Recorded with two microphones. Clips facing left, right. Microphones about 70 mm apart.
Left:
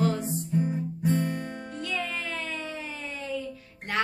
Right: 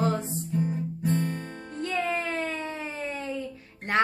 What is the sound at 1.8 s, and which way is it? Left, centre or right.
Music, right.